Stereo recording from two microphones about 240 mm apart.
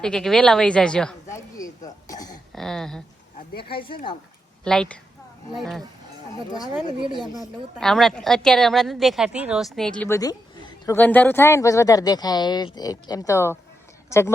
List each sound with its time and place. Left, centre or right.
0.0 s a woman's voice: centre
1.5 s speech: centre
2.5 s a woman's voice: centre
3.6 s speech: left
4.6 s a woman's voice: centre
7.8 s a woman's voice: centre